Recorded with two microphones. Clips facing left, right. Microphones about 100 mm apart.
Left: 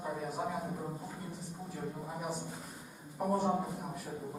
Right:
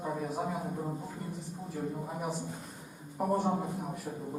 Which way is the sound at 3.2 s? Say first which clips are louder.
Right 2 dB; centre (ahead or behind).